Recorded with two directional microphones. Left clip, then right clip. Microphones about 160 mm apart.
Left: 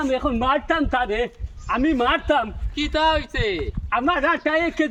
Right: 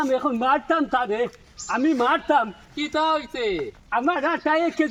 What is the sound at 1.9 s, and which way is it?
A man's voice, 30° left (ahead or behind).